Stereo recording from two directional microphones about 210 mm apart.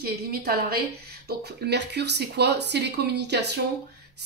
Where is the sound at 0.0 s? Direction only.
45° right (ahead or behind).